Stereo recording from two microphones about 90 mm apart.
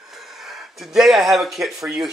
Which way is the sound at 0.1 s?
5° right (ahead or behind).